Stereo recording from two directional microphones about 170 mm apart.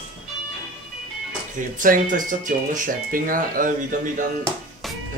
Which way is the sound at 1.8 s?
50° right (ahead or behind).